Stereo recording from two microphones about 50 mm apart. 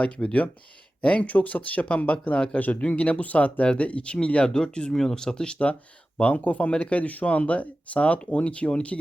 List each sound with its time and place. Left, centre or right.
0.0 s speech: left
2.6 s speech: left; by 5.5 s centre
6.1 s speech: left